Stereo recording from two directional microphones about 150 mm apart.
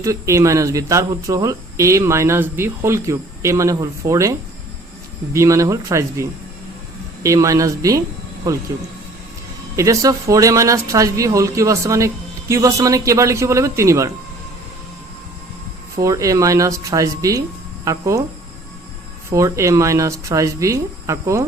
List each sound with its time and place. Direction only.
0.0 s speech: 20° right (ahead or behind)
9.7 s speech: 20° right (ahead or behind)
16.0 s speech: 20° right (ahead or behind)
19.3 s speech: 20° right (ahead or behind)